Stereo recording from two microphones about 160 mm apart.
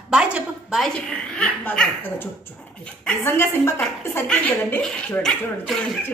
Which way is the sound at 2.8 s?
10° left (ahead or behind).